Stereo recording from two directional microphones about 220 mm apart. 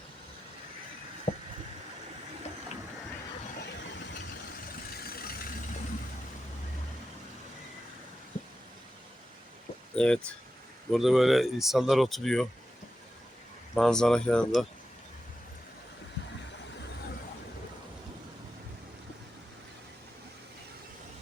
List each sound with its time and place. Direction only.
1.3 s vehicle: 30° left (ahead or behind)
4.9 s vehicle: 45° left (ahead or behind)
9.9 s speech: 5° left (ahead or behind)
13.7 s speech: centre (ahead or behind)